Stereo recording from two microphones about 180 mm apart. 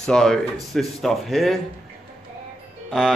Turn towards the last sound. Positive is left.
turn(degrees=0)  # may be behind; listen again after turning